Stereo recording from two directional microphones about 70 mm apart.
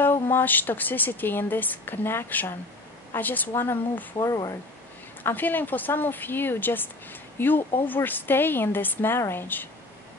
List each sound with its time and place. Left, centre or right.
0.0 s a woman's voice: left
4.2 s speech: left
5.2 s a woman's voice: left